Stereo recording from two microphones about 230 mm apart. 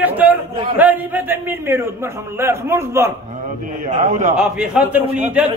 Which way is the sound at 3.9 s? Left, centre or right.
Right.